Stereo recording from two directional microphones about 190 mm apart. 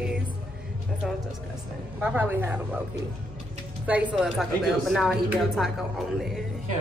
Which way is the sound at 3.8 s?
10° right (ahead or behind).